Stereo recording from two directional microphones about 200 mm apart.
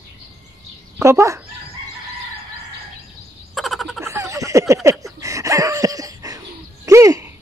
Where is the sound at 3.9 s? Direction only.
15° right (ahead or behind).